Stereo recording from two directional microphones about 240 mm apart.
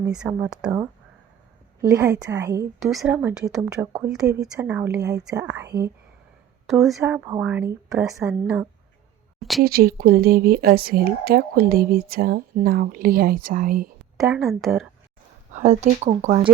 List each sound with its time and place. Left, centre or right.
0.0 s a woman's voice: centre
2.8 s a woman's voice: centre
6.7 s speech: centre
7.0 s a woman's voice: centre
9.6 s speech: right
14.2 s speech: centre
15.5 s speech: right